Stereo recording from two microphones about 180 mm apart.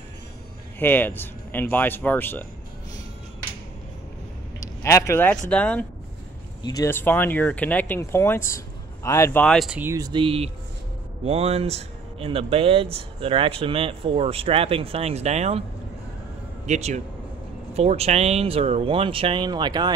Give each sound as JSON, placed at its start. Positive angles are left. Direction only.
{"t": 0.7, "sound": "speech", "side_deg": 10}
{"t": 4.6, "sound": "speech", "side_deg": 15}
{"t": 6.6, "sound": "speech", "side_deg": 20}
{"t": 9.8, "sound": "speech", "side_deg": -15}
{"t": 16.6, "sound": "speech", "side_deg": -40}